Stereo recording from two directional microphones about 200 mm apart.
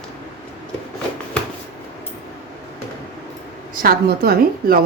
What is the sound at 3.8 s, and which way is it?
A woman's voice, 50° right (ahead or behind).